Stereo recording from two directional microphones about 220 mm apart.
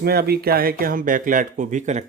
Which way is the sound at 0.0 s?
45° right (ahead or behind).